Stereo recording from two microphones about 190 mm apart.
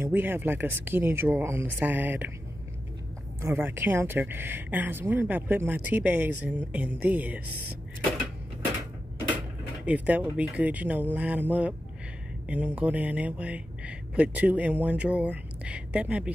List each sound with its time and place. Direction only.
0.0 s speech: 10° right (ahead or behind)
3.3 s speech: 15° right (ahead or behind)
9.8 s speech: 10° right (ahead or behind)